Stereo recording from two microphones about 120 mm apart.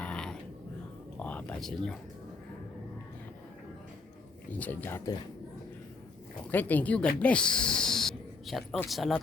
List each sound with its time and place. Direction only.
0.0 s a sound: 10° left (ahead or behind)
1.2 s speech: 10° left (ahead or behind)
4.5 s speech: 15° left (ahead or behind)
6.5 s speech: 15° left (ahead or behind); by 9.2 s centre (ahead or behind)